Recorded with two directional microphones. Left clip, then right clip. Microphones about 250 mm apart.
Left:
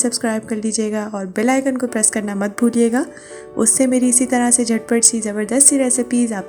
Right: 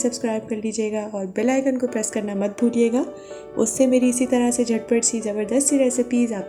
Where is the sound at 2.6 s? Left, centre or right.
Left.